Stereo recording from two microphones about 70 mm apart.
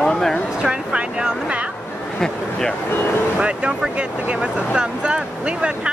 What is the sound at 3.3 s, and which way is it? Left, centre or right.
Speech, centre.